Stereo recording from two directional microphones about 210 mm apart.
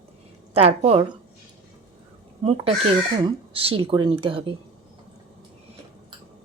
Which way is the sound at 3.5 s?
25° right (ahead or behind).